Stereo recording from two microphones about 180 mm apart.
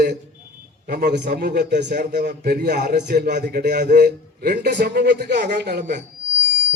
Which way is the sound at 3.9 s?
50° right (ahead or behind).